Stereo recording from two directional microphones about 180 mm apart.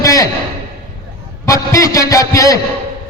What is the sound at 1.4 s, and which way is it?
A man's voice, 20° left (ahead or behind).